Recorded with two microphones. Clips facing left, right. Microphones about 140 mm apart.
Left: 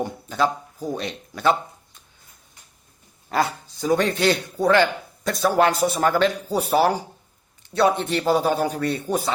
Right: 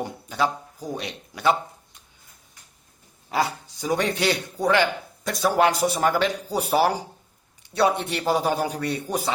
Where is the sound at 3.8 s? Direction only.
15° right (ahead or behind).